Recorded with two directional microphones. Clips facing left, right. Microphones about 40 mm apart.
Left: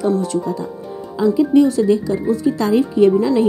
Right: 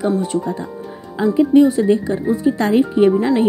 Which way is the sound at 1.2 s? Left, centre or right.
Right.